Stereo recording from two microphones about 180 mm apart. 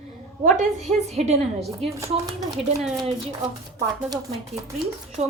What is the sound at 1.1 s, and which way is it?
Speech, 35° right (ahead or behind).